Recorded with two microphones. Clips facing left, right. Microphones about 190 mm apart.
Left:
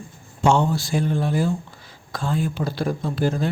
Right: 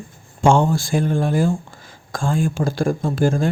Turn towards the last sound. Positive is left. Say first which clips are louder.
# right 4 dB
turn(degrees=-45)  # may be behind; listen again after turning